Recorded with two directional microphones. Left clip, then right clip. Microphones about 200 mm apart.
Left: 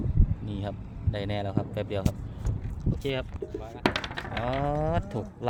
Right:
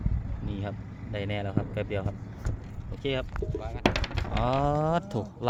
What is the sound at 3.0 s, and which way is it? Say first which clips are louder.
Speech: right 1 dB; centre (ahead or behind).